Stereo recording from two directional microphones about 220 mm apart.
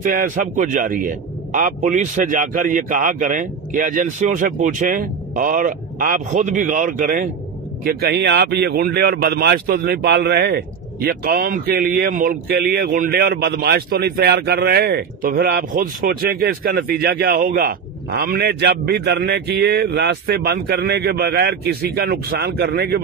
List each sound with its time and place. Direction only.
0.0 s a man's voice: 40° right (ahead or behind)